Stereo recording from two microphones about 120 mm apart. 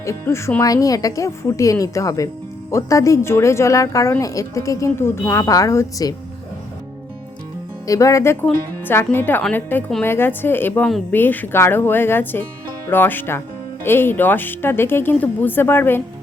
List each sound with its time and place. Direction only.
0.0 s speech: 25° left (ahead or behind)
7.9 s speech: 25° left (ahead or behind)